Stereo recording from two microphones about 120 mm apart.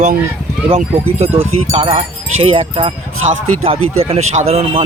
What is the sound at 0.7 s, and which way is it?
Speech, 55° right (ahead or behind).